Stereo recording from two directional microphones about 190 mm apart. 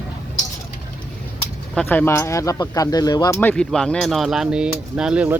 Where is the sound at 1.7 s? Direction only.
5° left (ahead or behind).